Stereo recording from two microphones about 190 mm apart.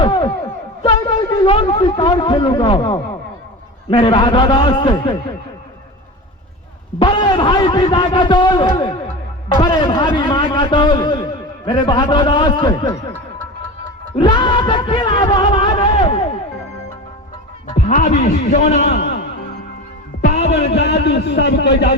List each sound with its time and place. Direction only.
0.0 s a sound: 25° left (ahead or behind)
0.8 s a man's voice: 25° left (ahead or behind)
7.0 s a man's voice: 25° left (ahead or behind)
14.2 s music: 25° left (ahead or behind)
17.7 s a man's voice: 45° left (ahead or behind)
20.7 s a man's voice: 65° left (ahead or behind)